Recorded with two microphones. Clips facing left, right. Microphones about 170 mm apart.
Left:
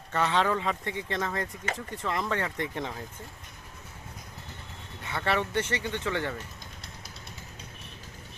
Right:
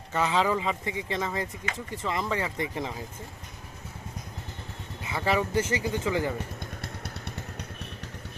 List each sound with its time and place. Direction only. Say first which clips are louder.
0.1 s speech: right 1 dB; centre (ahead or behind)
5.0 s speech: right 2 dB; 5° right (ahead or behind)
6.6 s motorcycle: right 8 dB; 60° right (ahead or behind)